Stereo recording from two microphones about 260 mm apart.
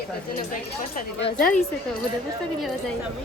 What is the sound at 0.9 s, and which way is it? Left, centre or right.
Speech, left.